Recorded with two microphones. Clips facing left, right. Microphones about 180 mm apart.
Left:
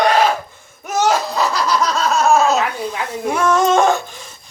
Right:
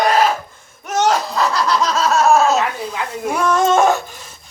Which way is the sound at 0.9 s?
5° left (ahead or behind).